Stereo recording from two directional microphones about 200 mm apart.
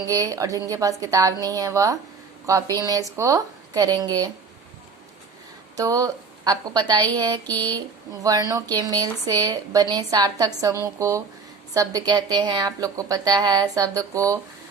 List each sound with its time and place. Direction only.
0.1 s a woman's voice: 15° right (ahead or behind)
5.7 s a woman's voice: 15° right (ahead or behind)